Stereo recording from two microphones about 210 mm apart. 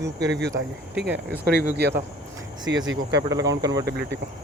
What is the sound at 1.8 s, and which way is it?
Cricket, 50° right (ahead or behind).